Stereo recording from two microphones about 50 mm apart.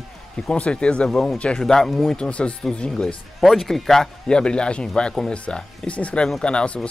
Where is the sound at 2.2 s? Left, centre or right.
Left.